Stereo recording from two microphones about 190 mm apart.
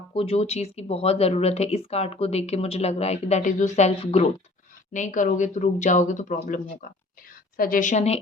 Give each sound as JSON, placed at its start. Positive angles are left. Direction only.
{"t": 0.1, "sound": "speech", "side_deg": 30}